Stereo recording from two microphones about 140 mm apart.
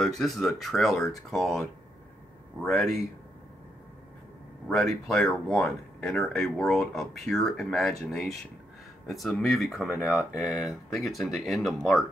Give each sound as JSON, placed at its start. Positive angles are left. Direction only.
{"t": 0.0, "sound": "speech", "side_deg": 0}
{"t": 2.7, "sound": "speech", "side_deg": 0}
{"t": 4.6, "sound": "speech", "side_deg": 0}